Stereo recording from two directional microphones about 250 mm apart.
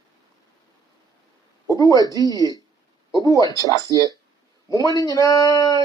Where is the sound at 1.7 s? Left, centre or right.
Centre.